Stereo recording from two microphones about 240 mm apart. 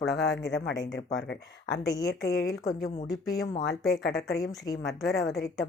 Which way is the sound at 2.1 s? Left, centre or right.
Left.